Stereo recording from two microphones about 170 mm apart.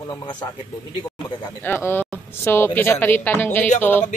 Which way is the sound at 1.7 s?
15° left (ahead or behind).